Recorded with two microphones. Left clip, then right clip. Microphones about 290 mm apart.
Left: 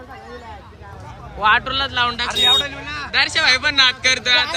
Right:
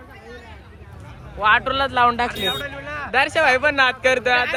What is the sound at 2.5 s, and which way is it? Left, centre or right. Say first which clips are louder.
Speech: left 8 dB; centre.